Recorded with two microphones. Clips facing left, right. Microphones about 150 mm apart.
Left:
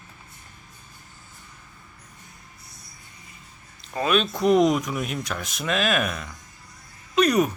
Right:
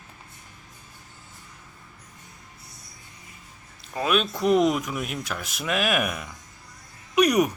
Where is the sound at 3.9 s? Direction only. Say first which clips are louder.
Left 1 dB; 5° right (ahead or behind).